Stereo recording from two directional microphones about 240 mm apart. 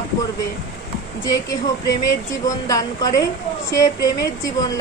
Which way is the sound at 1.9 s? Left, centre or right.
Centre.